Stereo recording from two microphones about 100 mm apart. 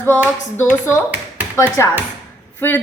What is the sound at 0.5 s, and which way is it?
Speech, 25° left (ahead or behind).